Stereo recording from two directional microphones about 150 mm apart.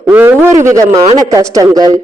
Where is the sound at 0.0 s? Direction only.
15° right (ahead or behind).